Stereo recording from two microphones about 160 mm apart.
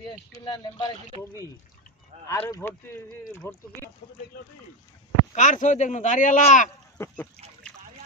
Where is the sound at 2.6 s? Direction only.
15° left (ahead or behind).